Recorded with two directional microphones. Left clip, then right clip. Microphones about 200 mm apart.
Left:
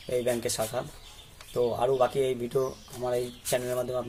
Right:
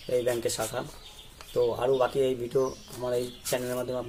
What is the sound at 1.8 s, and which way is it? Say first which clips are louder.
Speech: even; 10° left (ahead or behind).